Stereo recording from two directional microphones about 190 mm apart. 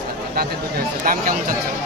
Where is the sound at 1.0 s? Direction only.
50° right (ahead or behind).